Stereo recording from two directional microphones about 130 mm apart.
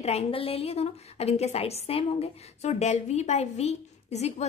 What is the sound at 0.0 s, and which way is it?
A woman's voice, 50° left (ahead or behind).